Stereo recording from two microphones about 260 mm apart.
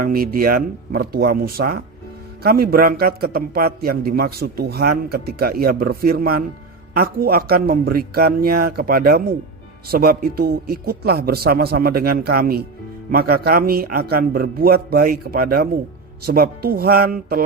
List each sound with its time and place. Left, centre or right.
0.0 s a man's voice: right